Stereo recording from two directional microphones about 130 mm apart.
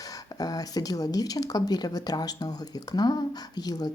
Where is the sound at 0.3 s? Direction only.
30° left (ahead or behind).